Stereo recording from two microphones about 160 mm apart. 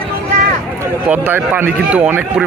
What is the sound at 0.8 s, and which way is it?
Speech, 15° right (ahead or behind).